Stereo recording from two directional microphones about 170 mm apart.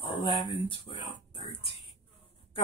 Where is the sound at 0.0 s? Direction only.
30° left (ahead or behind).